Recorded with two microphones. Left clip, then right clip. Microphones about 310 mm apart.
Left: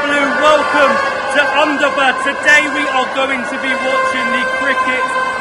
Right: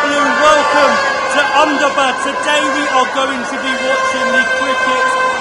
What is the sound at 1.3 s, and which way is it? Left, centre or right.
Speech, centre.